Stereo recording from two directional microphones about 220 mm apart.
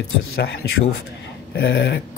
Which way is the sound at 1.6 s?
50° left (ahead or behind).